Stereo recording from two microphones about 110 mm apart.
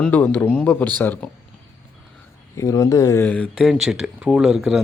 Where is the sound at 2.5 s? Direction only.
30° left (ahead or behind).